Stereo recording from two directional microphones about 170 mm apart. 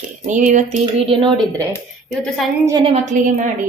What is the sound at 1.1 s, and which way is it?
Speech, 30° right (ahead or behind).